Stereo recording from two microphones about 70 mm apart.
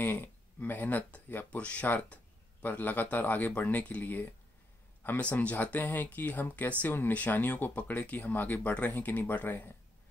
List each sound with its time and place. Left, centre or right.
0.0 s speech: left